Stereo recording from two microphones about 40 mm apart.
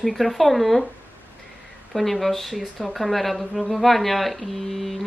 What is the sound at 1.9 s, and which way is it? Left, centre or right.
A woman's voice, centre.